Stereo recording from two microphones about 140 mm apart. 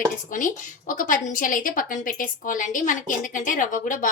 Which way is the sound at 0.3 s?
70° left (ahead or behind).